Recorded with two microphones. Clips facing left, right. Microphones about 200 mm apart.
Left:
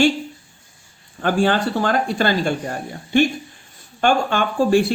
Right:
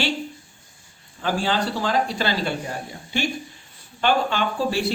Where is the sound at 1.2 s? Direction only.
55° left (ahead or behind).